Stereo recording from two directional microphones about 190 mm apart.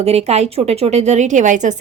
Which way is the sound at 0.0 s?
35° right (ahead or behind).